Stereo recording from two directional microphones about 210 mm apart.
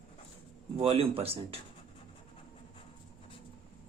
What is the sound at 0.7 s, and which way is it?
Speech, 25° right (ahead or behind).